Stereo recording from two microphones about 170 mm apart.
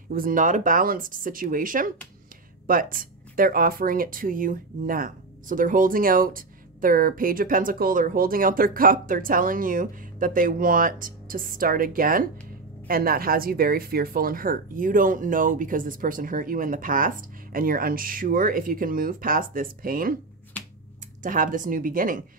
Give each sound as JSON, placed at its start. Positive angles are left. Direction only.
{"t": 0.1, "sound": "speech", "side_deg": -55}
{"t": 21.2, "sound": "speech", "side_deg": -55}